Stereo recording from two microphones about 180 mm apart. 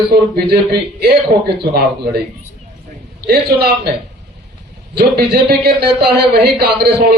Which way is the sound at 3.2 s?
60° right (ahead or behind).